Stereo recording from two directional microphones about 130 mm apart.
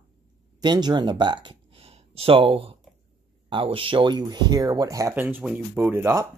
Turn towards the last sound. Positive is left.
turn(degrees=-20)  # may be behind; listen again after turning